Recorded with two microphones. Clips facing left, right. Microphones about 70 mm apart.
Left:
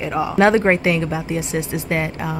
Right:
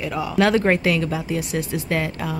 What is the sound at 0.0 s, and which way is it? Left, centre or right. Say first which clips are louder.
Speech: left 4 dB; left.